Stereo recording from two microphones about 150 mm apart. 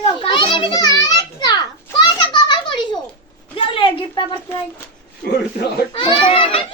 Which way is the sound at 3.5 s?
35° left (ahead or behind).